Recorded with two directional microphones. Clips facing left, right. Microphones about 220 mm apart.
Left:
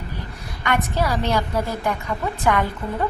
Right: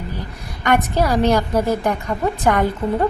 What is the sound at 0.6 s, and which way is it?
A woman's voice, 45° right (ahead or behind).